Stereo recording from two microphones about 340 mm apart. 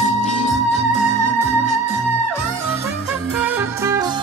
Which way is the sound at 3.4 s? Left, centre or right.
Centre.